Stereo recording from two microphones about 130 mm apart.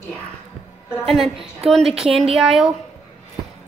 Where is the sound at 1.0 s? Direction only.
Centre (ahead or behind).